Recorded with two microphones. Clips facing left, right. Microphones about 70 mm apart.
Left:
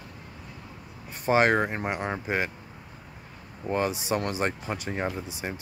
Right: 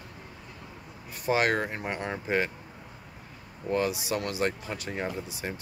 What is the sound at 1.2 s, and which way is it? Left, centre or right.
Speech, left.